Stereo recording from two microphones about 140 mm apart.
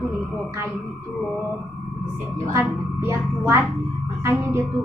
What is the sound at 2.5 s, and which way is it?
A woman's voice, 20° right (ahead or behind).